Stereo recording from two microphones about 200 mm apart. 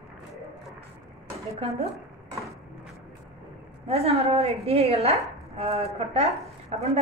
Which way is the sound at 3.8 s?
30° right (ahead or behind).